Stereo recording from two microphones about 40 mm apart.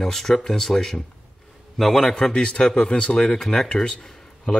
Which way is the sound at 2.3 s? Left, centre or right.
Left.